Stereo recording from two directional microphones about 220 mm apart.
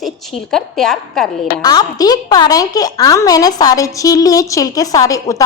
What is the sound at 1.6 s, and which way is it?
A woman's voice, 15° left (ahead or behind).